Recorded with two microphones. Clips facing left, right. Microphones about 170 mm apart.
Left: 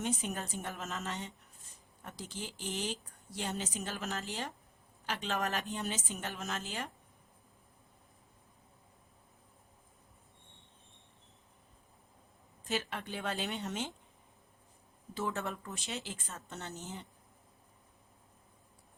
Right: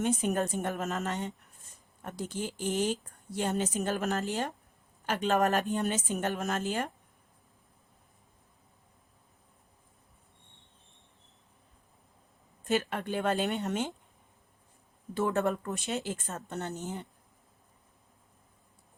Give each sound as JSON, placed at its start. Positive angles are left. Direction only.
{"t": 0.0, "sound": "speech", "side_deg": -55}
{"t": 12.6, "sound": "speech", "side_deg": -50}
{"t": 15.1, "sound": "speech", "side_deg": -55}